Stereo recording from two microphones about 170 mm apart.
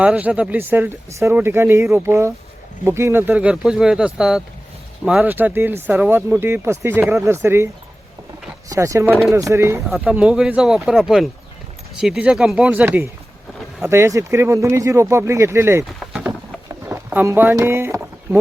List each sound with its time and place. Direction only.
0.0 s speech: 10° right (ahead or behind)
8.7 s speech: 20° right (ahead or behind)
9.9 s speech: 5° right (ahead or behind)
16.9 s a sound: 15° right (ahead or behind)